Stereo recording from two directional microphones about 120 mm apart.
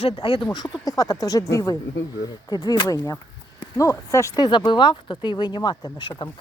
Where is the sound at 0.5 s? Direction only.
35° left (ahead or behind).